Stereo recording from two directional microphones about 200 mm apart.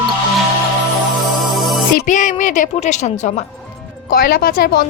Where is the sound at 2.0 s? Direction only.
40° left (ahead or behind).